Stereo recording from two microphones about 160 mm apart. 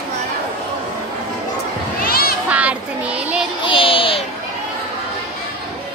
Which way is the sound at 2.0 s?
70° left (ahead or behind).